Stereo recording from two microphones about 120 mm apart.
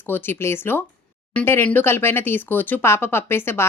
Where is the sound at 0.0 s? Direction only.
15° left (ahead or behind).